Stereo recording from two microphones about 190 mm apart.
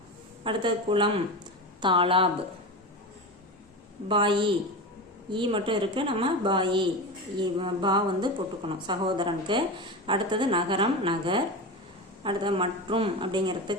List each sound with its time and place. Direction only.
0.4 s a woman's voice: 25° right (ahead or behind)
4.1 s a woman's voice: 25° right (ahead or behind)